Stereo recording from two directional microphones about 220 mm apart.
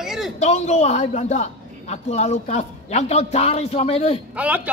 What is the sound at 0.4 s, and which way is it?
A man's voice, 30° left (ahead or behind).